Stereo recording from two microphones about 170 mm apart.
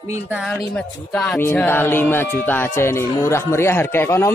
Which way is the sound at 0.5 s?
5° left (ahead or behind).